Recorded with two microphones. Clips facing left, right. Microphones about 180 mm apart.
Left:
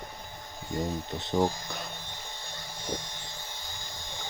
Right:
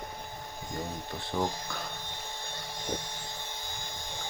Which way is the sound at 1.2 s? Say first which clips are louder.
Left 5 dB; 20° left (ahead or behind).